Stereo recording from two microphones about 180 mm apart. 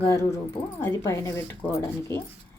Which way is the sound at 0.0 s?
15° left (ahead or behind).